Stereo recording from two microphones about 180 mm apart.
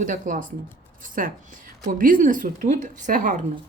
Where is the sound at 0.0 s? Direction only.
45° right (ahead or behind).